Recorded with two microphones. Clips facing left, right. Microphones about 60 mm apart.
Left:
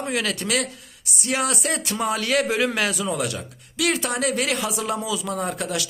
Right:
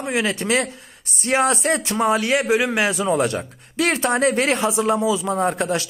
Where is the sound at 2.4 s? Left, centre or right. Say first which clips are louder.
Right 3 dB; centre.